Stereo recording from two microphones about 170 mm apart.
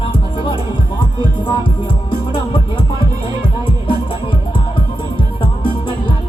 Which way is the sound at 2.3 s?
30° left (ahead or behind).